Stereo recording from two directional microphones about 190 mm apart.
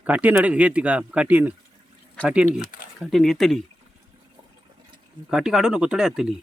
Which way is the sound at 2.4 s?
40° left (ahead or behind).